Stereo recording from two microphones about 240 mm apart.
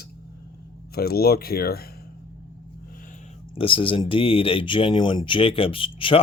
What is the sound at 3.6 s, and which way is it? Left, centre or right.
Speech, left.